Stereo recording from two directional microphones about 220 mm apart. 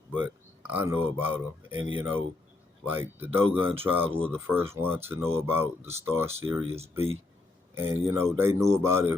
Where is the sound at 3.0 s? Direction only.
10° right (ahead or behind).